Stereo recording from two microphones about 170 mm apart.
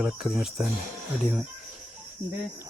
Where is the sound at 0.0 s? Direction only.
Centre (ahead or behind).